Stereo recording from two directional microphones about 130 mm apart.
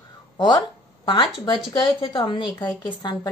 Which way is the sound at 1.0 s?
40° left (ahead or behind).